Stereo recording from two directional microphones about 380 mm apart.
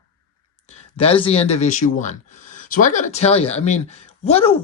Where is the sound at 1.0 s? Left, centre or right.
Centre.